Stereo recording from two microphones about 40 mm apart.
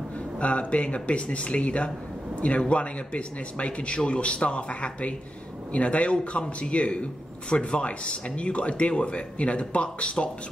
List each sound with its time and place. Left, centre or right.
0.4 s a man's voice: left